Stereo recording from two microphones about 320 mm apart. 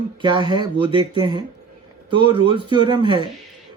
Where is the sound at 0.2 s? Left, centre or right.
Centre.